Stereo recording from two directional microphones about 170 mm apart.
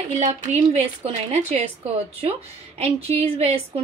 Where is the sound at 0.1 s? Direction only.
45° right (ahead or behind).